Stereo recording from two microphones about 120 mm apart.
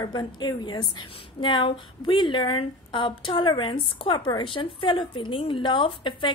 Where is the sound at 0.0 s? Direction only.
35° left (ahead or behind).